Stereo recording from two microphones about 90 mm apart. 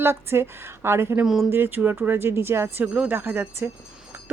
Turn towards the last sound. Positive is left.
turn(degrees=-25)  # may be behind; listen again after turning